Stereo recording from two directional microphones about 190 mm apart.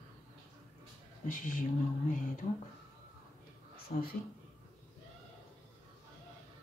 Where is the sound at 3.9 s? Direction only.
40° left (ahead or behind).